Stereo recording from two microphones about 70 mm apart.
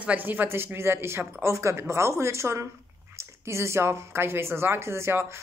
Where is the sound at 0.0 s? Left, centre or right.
Right.